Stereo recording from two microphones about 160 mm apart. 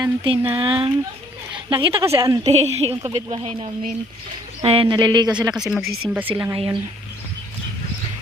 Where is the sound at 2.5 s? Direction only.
40° right (ahead or behind).